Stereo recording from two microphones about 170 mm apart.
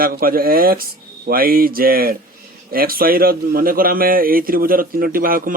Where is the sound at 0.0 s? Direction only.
60° right (ahead or behind).